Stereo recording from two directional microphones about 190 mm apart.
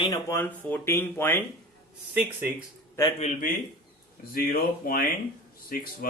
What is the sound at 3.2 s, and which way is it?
Speech, 40° left (ahead or behind).